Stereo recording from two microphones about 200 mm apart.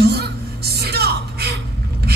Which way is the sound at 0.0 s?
55° right (ahead or behind).